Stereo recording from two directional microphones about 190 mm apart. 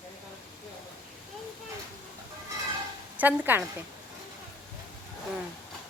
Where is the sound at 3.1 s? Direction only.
10° right (ahead or behind).